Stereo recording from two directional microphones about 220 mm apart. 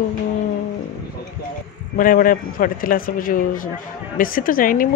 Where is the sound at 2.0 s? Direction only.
40° left (ahead or behind).